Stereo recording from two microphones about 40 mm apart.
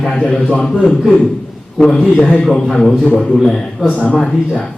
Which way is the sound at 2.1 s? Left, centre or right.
Left.